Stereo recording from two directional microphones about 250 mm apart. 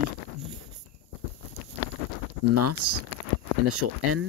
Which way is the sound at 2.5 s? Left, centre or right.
Right.